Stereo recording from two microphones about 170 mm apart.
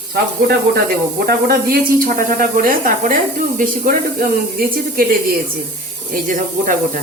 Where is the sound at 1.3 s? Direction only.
60° right (ahead or behind).